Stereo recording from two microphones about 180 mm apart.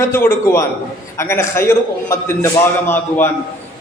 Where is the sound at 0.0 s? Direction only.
15° left (ahead or behind).